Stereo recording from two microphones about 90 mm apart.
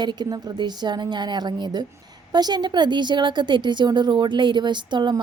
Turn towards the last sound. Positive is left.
turn(degrees=-60)  # may be behind; listen again after turning